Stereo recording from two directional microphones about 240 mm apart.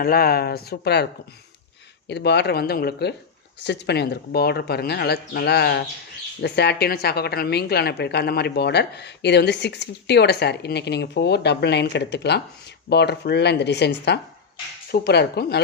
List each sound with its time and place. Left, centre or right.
0.0 s speech: left
2.0 s a woman's voice: left